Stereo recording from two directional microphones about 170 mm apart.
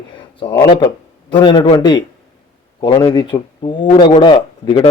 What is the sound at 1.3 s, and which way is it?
Speech, 25° left (ahead or behind).